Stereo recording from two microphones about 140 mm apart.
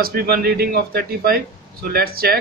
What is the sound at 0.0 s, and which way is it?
Speech, 90° right.